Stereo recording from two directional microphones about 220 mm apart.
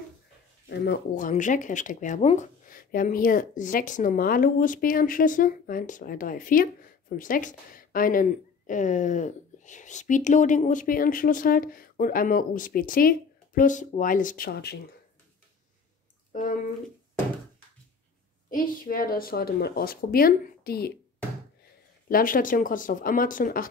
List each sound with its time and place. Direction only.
0.7 s speech: 45° left (ahead or behind)
16.3 s a sound: 35° left (ahead or behind)
18.5 s speech: 40° left (ahead or behind)
22.1 s speech: 40° left (ahead or behind)